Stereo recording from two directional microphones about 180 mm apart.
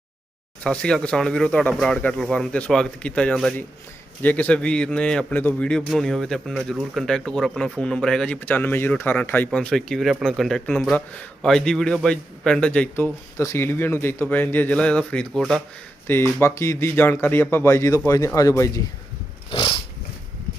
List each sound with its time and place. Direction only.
0.6 s a man's voice: 5° left (ahead or behind)
16.0 s a man's voice: 15° left (ahead or behind)
19.5 s wild animals: 30° left (ahead or behind)